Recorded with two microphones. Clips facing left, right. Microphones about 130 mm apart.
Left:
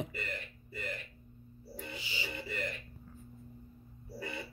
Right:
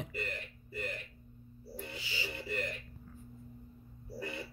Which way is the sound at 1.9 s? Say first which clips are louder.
Even; 20° left (ahead or behind).